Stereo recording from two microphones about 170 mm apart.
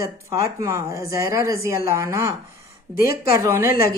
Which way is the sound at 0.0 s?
20° right (ahead or behind).